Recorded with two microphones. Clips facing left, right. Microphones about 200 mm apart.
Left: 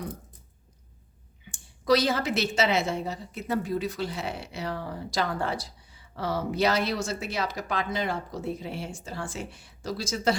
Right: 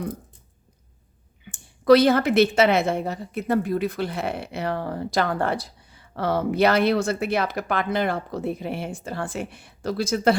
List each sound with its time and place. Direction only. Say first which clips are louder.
1.5 s a woman's voice: right 8 dB; 55° right (ahead or behind)